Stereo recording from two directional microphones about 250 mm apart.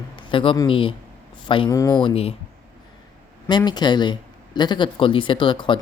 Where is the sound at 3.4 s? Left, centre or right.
Centre.